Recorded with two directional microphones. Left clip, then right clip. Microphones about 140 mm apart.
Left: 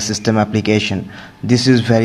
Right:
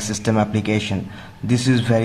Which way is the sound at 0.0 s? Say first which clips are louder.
Left 4 dB; 15° left (ahead or behind).